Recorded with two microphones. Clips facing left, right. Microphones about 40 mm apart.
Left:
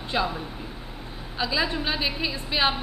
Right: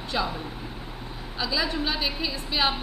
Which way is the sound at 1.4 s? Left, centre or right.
Centre.